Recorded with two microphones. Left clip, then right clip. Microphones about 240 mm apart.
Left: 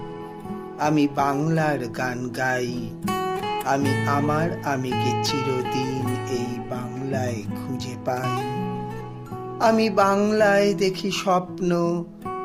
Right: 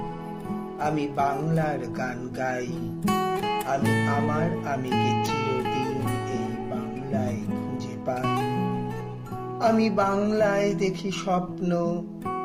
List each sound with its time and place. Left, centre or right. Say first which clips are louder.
0.8 s music: left 4 dB; left
3.0 s music: even; centre
4.0 s music: left 3 dB; left
4.9 s music: right 1 dB; centre
8.1 s music: even; centre
9.6 s music: left 4 dB; left